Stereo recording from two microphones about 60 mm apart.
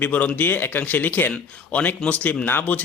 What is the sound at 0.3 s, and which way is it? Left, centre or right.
Speech, left.